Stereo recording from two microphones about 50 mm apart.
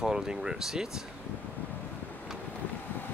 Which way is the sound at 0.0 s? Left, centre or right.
Centre.